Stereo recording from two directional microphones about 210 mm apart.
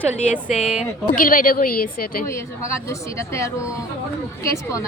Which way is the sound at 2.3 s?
15° left (ahead or behind).